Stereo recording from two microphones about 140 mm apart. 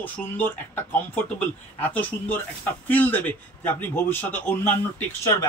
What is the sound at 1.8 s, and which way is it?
A man's voice, 10° left (ahead or behind).